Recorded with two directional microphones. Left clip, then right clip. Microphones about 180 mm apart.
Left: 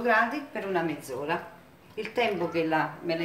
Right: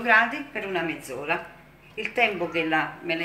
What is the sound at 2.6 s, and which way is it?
Speech, 40° left (ahead or behind).